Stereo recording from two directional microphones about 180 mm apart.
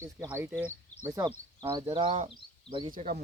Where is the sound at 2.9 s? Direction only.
45° right (ahead or behind).